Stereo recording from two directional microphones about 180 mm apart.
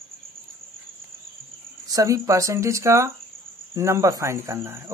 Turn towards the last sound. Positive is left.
turn(degrees=-15)  # may be behind; listen again after turning